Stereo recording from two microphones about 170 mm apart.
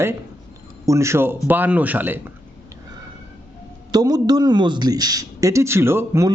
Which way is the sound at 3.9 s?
25° right (ahead or behind).